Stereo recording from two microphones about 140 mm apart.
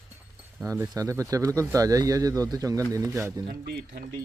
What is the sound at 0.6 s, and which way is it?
Speech, 15° right (ahead or behind).